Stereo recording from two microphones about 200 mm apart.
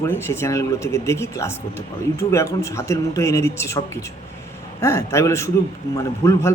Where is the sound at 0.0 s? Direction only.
15° left (ahead or behind).